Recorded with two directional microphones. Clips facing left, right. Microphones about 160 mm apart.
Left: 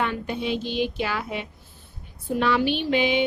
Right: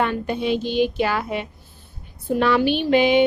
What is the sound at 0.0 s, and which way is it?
A woman's voice, 50° right (ahead or behind).